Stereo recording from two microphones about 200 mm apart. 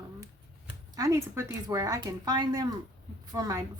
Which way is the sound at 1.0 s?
15° right (ahead or behind).